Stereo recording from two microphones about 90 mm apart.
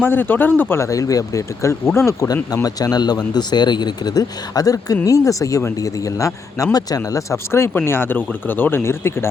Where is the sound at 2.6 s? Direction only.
45° left (ahead or behind).